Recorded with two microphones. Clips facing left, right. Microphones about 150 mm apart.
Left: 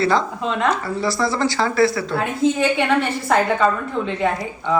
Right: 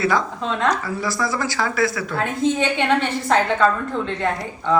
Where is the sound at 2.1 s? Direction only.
5° left (ahead or behind).